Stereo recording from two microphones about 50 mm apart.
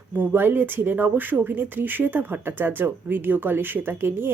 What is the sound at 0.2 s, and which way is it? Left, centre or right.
Speech, right.